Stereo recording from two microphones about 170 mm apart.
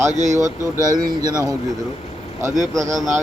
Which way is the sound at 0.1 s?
45° right (ahead or behind).